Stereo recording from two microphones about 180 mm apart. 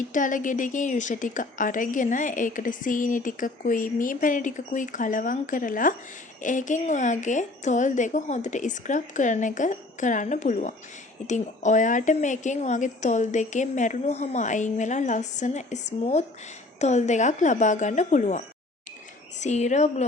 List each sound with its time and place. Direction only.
0.1 s a woman's voice: 45° left (ahead or behind)